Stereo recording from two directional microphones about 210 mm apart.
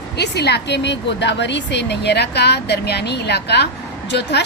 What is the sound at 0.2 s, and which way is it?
A woman's voice, 50° left (ahead or behind).